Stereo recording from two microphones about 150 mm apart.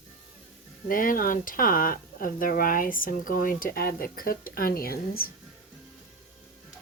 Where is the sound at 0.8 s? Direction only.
65° left (ahead or behind); by 5.3 s 85° left.